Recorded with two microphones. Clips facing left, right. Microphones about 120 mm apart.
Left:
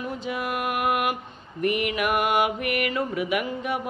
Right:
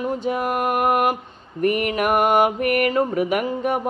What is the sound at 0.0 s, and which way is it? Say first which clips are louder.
Mantra: right 7 dB; 40° right (ahead or behind).